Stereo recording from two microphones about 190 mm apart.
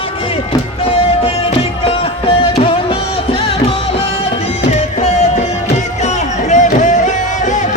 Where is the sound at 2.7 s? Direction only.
30° left (ahead or behind).